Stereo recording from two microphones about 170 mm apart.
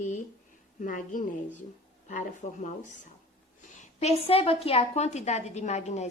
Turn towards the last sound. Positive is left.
turn(degrees=40)  # may be behind; listen again after turning